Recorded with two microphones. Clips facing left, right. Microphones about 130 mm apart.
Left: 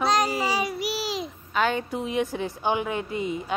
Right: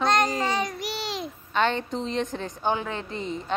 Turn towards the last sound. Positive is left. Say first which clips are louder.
# left 3 dB
turn(degrees=10)  # may be behind; listen again after turning